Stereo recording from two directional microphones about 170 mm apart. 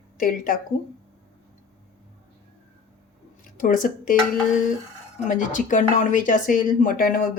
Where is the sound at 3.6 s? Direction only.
55° left (ahead or behind).